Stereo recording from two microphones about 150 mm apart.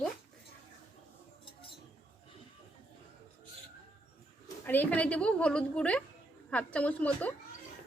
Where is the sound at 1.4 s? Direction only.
35° left (ahead or behind).